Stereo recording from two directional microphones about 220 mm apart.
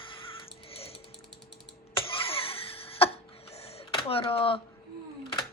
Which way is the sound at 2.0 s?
25° left (ahead or behind).